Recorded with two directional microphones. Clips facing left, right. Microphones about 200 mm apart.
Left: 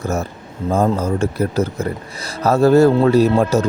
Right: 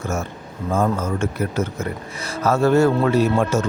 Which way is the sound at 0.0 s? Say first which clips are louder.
Left 4 dB; 35° left (ahead or behind).